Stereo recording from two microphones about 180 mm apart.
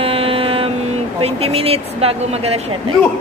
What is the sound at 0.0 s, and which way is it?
Music, 30° right (ahead or behind).